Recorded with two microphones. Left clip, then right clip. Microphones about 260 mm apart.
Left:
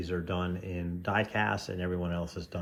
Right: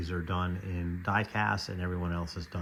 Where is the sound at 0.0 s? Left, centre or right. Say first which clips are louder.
Left 1 dB; right.